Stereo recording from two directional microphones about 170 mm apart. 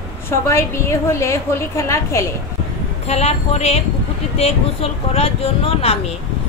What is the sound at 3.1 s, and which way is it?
Speech, 40° left (ahead or behind).